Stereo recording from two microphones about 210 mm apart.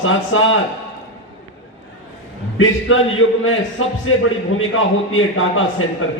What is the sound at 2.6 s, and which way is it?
A man's voice, 70° left (ahead or behind).